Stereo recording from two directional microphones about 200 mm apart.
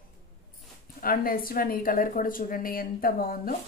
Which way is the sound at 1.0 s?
45° left (ahead or behind).